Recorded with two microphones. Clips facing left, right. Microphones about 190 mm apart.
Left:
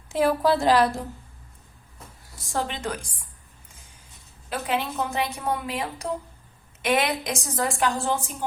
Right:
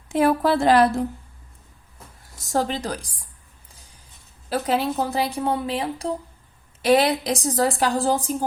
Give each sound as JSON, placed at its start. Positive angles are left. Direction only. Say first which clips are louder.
{"t": 0.1, "sound": "a woman's voice", "louder": "right 2 dB", "side_deg": -60}
{"t": 2.4, "sound": "a woman's voice", "louder": "right 5 dB", "side_deg": -40}
{"t": 3.7, "sound": "music", "louder": "right 2 dB", "side_deg": -35}
{"t": 4.4, "sound": "a woman's voice", "louder": "right 5 dB", "side_deg": -35}